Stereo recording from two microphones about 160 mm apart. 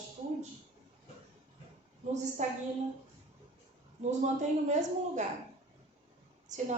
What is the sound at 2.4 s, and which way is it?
Speech, 50° right (ahead or behind).